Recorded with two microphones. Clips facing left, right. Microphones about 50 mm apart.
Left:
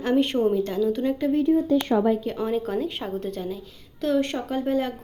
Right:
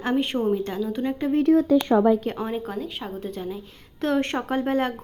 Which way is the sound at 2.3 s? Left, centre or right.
Centre.